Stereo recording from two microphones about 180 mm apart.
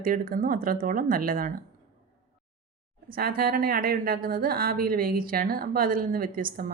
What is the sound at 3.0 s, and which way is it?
Speech, 55° right (ahead or behind).